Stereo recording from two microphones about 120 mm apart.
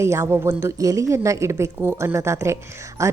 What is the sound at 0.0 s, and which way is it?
A woman's voice, 25° right (ahead or behind).